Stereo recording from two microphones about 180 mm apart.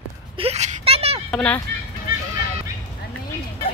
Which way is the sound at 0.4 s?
35° right (ahead or behind).